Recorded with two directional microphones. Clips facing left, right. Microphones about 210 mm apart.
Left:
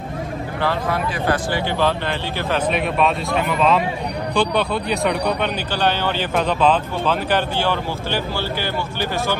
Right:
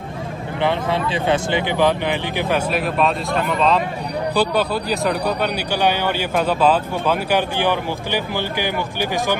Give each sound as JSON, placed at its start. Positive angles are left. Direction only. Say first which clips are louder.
{"t": 0.6, "sound": "speech", "louder": "right 2 dB", "side_deg": -20}
{"t": 2.7, "sound": "speech", "louder": "even", "side_deg": 0}
{"t": 5.8, "sound": "speech", "louder": "right 1 dB", "side_deg": -10}